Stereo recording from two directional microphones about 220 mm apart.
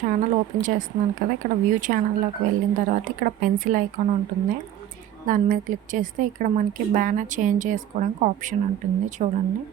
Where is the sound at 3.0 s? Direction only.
40° right (ahead or behind).